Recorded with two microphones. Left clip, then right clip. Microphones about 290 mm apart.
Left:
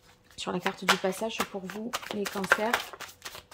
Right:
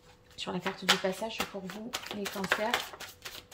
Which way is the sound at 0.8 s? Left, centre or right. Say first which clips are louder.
Left 1 dB; left.